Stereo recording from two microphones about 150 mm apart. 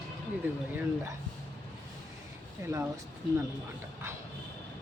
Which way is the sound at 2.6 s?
20° right (ahead or behind).